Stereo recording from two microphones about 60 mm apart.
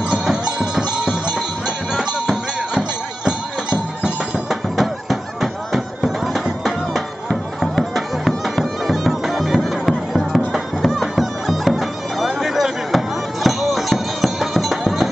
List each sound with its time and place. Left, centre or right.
0.1 s cowbell: centre
2.0 s music: centre
4.5 s music: centre